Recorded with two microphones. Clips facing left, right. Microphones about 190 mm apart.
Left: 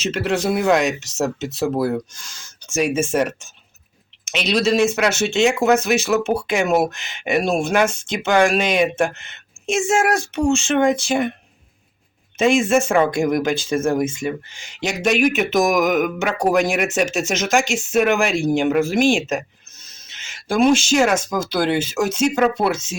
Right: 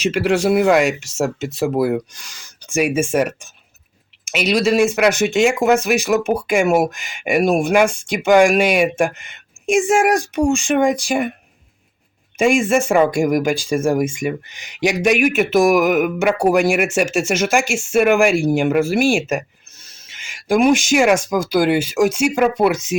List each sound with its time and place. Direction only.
0.0 s speech: 10° right (ahead or behind)
12.4 s speech: 10° right (ahead or behind)